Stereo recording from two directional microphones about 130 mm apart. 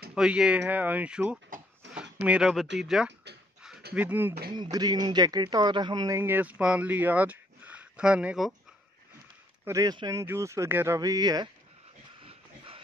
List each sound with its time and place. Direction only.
0.1 s speech: 5° right (ahead or behind)
4.6 s a man's voice: 30° right (ahead or behind); by 8.5 s 10° right (ahead or behind)
9.7 s a man's voice: 25° right (ahead or behind)
10.2 s a man's voice: 20° right (ahead or behind)
11.0 s speech: 30° right (ahead or behind)
12.3 s a sound: 45° right (ahead or behind)